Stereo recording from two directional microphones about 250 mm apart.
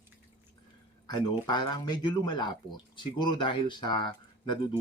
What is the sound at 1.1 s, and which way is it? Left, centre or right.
Speech, centre.